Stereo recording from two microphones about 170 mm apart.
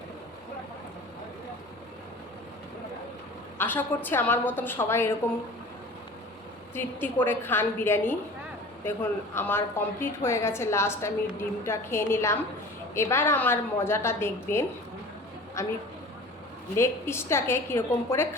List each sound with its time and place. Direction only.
3.6 s a woman's voice: 10° left (ahead or behind)
6.7 s a woman's voice: 10° left (ahead or behind)
16.7 s a woman's voice: 15° left (ahead or behind)